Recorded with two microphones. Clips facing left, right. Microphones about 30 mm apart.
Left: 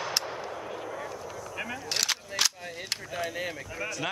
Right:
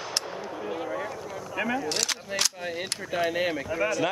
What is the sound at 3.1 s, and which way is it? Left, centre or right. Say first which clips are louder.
Speech: right 9 dB; right.